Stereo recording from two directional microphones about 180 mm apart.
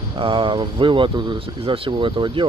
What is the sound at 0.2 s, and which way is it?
Speech, 30° right (ahead or behind).